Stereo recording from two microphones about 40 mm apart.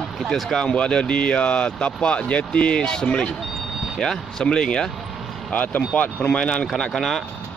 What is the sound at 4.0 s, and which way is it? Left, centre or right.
Speech, centre.